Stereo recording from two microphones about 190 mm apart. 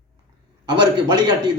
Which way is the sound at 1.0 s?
20° right (ahead or behind).